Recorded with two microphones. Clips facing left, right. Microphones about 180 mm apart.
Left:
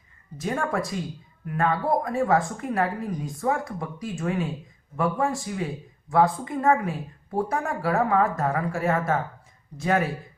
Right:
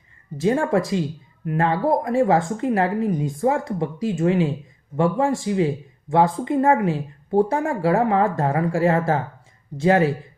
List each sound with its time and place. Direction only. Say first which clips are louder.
0.3 s speech: right 8 dB; 25° right (ahead or behind)